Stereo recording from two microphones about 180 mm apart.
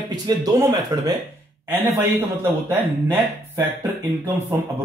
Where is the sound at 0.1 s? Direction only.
20° right (ahead or behind).